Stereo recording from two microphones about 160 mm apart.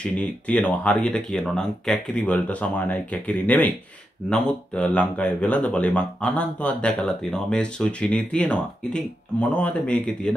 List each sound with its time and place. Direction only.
0.0 s speech: 5° left (ahead or behind)